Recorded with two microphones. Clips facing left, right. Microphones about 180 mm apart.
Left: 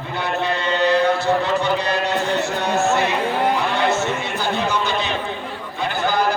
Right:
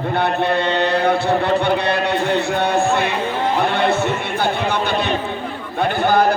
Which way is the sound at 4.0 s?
60° right (ahead or behind).